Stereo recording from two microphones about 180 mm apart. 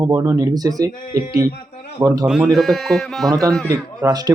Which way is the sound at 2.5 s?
Centre (ahead or behind).